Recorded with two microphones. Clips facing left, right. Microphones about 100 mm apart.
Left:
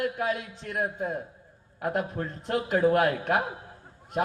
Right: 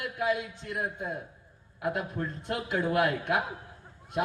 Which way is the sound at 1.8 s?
40° left (ahead or behind).